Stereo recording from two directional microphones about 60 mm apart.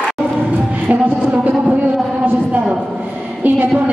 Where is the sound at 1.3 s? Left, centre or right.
Right.